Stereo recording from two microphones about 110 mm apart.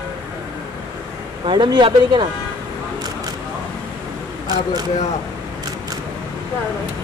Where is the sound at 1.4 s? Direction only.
45° right (ahead or behind).